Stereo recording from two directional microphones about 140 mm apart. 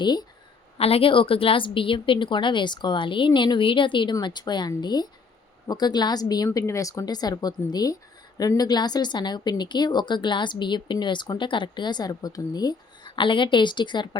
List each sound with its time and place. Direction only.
0.0 s speech: 30° left (ahead or behind)
0.8 s speech: 45° left (ahead or behind)